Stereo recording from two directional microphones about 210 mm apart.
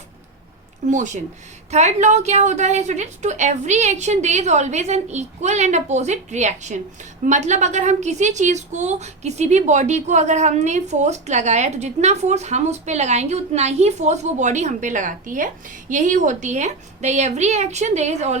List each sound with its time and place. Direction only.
0.9 s a woman's voice: 35° right (ahead or behind)